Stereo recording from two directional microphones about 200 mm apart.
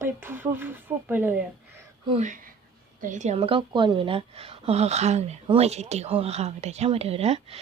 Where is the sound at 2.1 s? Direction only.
40° right (ahead or behind).